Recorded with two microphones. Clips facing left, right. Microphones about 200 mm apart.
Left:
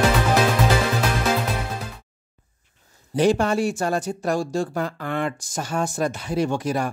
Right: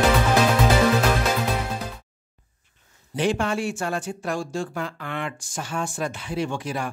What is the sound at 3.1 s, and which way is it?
Speech, 40° left (ahead or behind).